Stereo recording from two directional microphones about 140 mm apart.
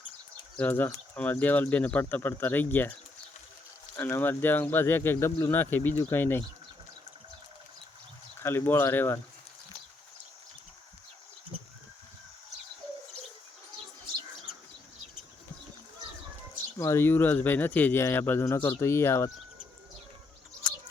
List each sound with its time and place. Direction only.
0.5 s speech: 15° left (ahead or behind)
3.9 s speech: 15° left (ahead or behind)
8.4 s speech: 15° left (ahead or behind)
16.7 s speech: 20° left (ahead or behind)